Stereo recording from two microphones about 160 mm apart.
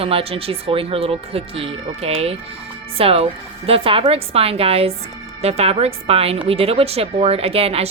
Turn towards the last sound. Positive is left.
turn(degrees=-40)  # may be behind; listen again after turning